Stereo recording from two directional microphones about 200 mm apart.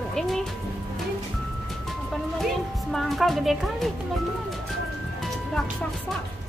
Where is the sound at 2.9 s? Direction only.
Centre (ahead or behind).